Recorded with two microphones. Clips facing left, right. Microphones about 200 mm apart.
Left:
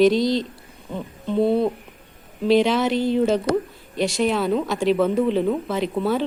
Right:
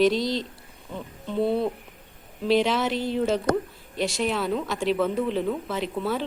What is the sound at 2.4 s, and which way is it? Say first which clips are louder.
Speech: left 4 dB; centre (ahead or behind).